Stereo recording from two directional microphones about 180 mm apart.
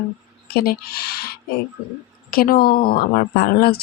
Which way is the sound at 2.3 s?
55° left (ahead or behind).